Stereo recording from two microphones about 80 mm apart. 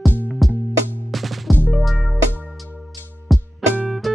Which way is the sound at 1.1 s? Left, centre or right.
Centre.